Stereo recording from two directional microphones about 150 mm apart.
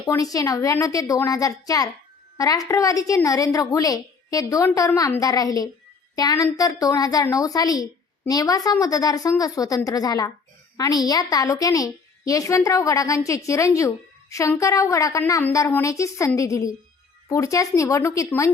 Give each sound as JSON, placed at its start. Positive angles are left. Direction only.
{"t": 0.0, "sound": "a woman's voice", "side_deg": 25}